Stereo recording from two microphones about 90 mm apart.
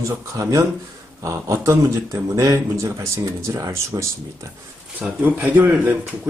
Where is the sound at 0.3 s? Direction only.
35° right (ahead or behind).